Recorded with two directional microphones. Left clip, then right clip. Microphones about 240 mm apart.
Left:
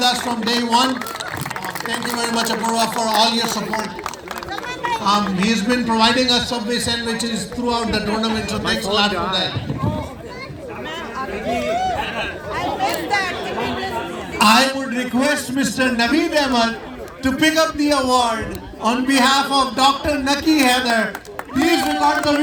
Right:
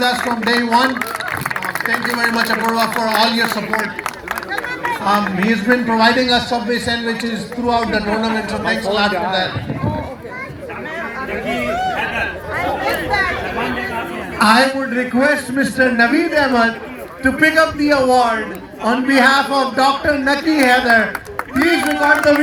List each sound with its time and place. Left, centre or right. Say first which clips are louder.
0.0 s a man's voice: right 2 dB; left
12.8 s chatter: right 1 dB; left
14.3 s a man's voice: right 2 dB; left